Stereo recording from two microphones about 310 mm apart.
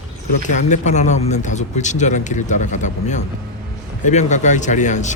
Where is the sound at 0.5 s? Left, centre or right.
Left.